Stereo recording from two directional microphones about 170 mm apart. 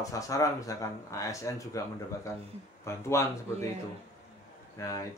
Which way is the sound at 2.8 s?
15° left (ahead or behind).